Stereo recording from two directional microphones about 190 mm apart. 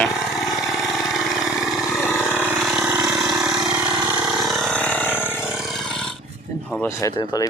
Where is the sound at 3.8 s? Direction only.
25° right (ahead or behind).